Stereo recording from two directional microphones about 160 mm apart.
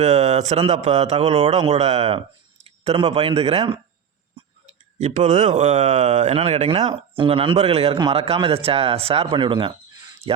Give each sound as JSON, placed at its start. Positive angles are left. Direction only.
{"t": 0.0, "sound": "speech", "side_deg": -45}
{"t": 4.9, "sound": "speech", "side_deg": -50}